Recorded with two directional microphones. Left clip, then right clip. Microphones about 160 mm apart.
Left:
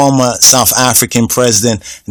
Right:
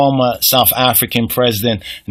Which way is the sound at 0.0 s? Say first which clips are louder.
Left 4 dB; 40° left (ahead or behind).